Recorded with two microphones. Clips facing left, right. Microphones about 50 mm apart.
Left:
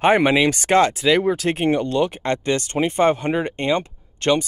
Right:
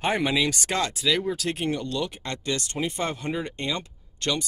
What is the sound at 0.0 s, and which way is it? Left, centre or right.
Speech, left.